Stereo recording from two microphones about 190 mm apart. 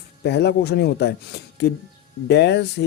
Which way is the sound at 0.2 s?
60° left (ahead or behind).